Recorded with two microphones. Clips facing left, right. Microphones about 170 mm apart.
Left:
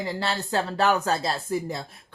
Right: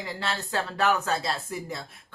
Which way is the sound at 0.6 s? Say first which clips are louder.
Left 2 dB; 35° left (ahead or behind).